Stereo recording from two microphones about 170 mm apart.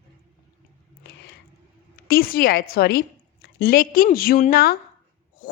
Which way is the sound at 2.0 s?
60° left (ahead or behind).